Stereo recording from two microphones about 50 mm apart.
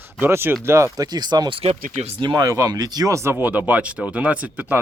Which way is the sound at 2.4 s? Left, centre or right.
Right.